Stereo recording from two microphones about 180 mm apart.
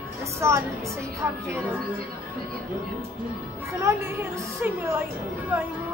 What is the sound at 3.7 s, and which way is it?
A woman's voice, 15° right (ahead or behind).